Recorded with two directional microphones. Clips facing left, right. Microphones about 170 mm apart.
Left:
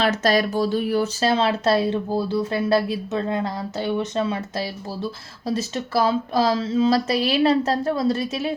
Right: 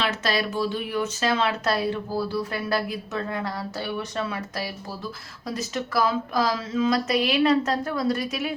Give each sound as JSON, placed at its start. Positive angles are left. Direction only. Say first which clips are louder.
{"t": 0.0, "sound": "speech", "louder": "left 6 dB", "side_deg": 40}